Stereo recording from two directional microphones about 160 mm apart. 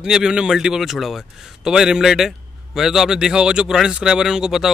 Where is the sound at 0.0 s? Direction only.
5° right (ahead or behind).